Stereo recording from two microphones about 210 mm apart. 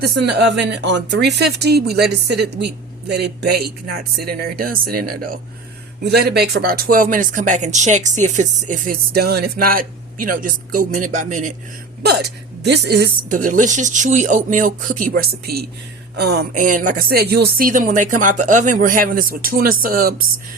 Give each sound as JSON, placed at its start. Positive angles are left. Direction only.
{"t": 0.0, "sound": "speech", "side_deg": -50}
{"t": 12.0, "sound": "speech", "side_deg": -50}